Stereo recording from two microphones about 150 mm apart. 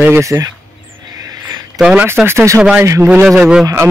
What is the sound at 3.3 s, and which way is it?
Speech, 5° right (ahead or behind).